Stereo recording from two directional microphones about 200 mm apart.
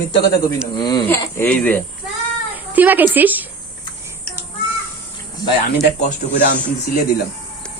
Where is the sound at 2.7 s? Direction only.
10° right (ahead or behind).